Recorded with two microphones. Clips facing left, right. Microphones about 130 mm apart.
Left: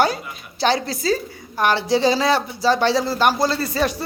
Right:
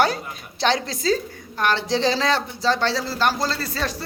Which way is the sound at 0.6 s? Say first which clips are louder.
Left 2 dB; 5° left (ahead or behind).